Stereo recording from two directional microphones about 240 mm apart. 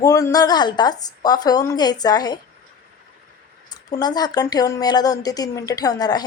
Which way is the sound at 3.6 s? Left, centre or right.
Centre.